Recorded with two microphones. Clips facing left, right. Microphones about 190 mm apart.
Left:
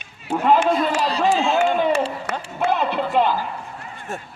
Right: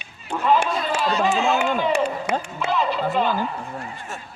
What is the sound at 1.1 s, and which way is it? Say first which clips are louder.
Speech: right 3 dB; 35° left (ahead or behind).